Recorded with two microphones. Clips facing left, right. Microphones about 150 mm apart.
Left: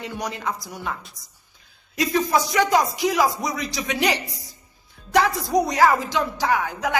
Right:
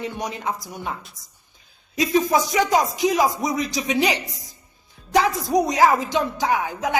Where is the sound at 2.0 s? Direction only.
20° right (ahead or behind).